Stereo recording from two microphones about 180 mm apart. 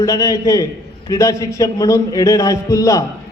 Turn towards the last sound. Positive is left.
turn(degrees=20)  # may be behind; listen again after turning